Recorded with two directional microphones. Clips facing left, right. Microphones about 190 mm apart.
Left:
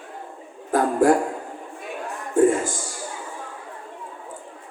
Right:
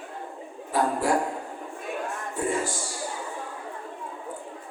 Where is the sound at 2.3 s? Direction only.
50° left (ahead or behind).